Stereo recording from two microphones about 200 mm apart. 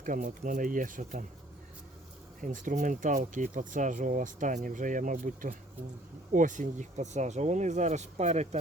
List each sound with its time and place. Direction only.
0.0 s speech: 40° right (ahead or behind)
2.4 s speech: 40° right (ahead or behind)